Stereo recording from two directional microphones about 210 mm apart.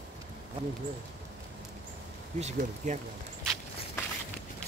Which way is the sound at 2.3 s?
35° right (ahead or behind).